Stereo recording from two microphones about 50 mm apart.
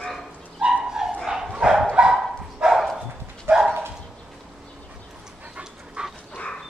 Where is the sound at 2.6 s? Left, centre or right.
Centre.